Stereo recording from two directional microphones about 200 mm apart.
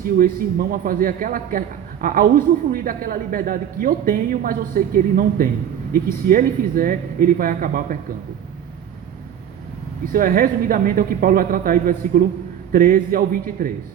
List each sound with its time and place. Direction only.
0.2 s a man's voice: 45° right (ahead or behind)
10.1 s a man's voice: 45° right (ahead or behind)